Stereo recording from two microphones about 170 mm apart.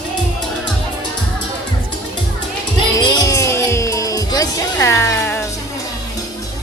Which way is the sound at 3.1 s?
20° left (ahead or behind).